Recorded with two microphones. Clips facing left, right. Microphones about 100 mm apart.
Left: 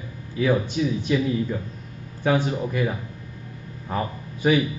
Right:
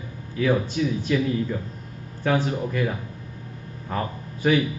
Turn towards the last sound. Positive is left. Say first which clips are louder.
# left 1 dB
turn(degrees=15)  # may be behind; listen again after turning